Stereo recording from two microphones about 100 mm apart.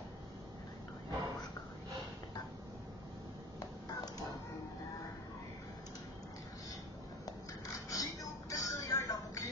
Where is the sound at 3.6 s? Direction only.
35° left (ahead or behind).